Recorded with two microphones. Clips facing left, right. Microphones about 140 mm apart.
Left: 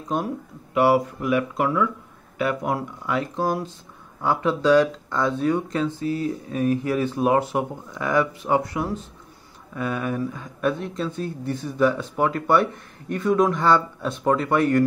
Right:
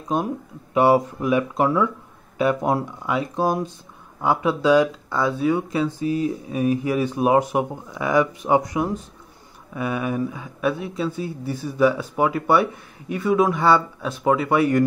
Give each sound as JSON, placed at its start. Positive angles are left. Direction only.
{"t": 0.1, "sound": "speech", "side_deg": -15}